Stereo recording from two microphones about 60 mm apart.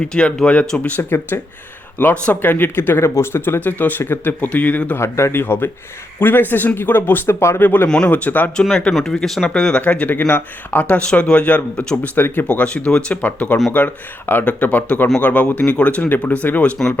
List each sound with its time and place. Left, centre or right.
0.0 s speech: centre; by 3.6 s left
3.6 s speech: left
4.9 s speech: left
7.6 s speech: left
8.7 s speech: centre
9.5 s speech: centre; by 10.8 s left
10.8 s speech: left
12.5 s speech: left